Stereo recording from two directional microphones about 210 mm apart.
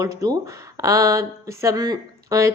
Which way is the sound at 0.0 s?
15° right (ahead or behind).